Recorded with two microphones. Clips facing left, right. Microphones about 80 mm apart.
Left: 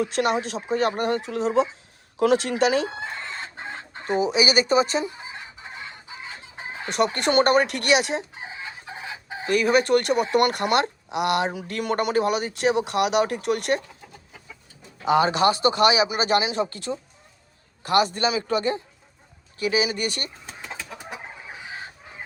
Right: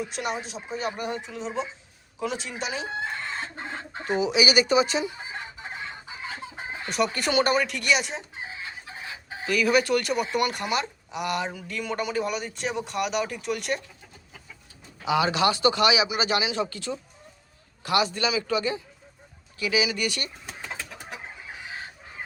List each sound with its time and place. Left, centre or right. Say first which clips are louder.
0.0 s speech: left 8 dB; left
2.1 s speech: left 11 dB; left
4.2 s speech: left 1 dB; left
6.9 s speech: left 4 dB; left
9.5 s speech: left 3 dB; left
15.0 s speech: left 4 dB; left